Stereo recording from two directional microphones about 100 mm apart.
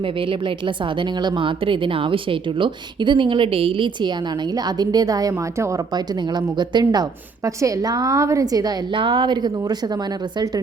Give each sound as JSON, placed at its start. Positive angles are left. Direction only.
{"t": 0.0, "sound": "speech", "side_deg": -60}
{"t": 4.5, "sound": "a woman's voice", "side_deg": -40}
{"t": 5.9, "sound": "a woman's voice", "side_deg": -45}
{"t": 8.9, "sound": "speech", "side_deg": -55}